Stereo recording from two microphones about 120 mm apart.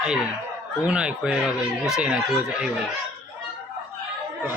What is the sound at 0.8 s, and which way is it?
Speech, 10° right (ahead or behind).